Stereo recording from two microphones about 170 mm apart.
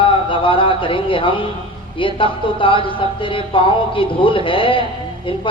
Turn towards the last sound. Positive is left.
turn(degrees=30)  # may be behind; listen again after turning